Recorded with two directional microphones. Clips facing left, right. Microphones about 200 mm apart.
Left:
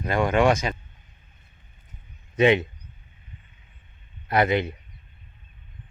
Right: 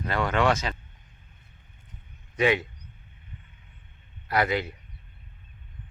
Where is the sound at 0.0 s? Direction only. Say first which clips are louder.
Left 4 dB; 15° left (ahead or behind).